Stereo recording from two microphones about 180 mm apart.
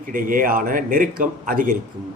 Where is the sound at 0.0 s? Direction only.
50° right (ahead or behind).